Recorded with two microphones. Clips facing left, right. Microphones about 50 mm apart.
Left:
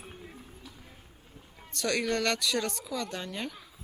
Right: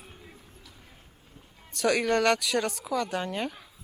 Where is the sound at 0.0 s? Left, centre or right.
Centre.